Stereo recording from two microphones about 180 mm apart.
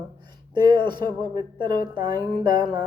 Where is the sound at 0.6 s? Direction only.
25° right (ahead or behind).